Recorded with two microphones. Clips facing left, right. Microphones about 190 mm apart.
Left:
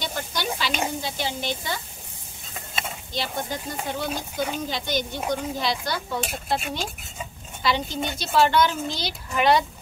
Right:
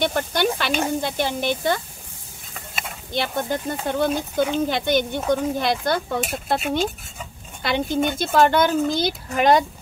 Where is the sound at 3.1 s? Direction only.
55° right (ahead or behind).